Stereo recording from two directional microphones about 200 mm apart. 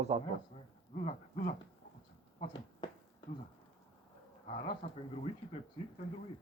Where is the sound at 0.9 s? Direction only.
35° left (ahead or behind).